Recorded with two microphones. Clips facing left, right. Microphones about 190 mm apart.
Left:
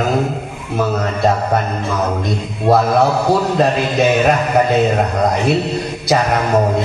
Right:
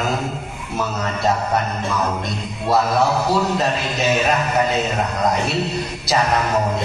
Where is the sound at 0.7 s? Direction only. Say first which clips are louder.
Left 6 dB; 55° left (ahead or behind).